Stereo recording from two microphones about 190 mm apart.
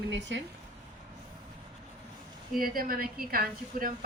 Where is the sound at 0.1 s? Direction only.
70° right (ahead or behind).